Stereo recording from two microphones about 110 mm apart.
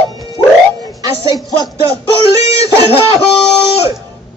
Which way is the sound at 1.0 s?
35° right (ahead or behind).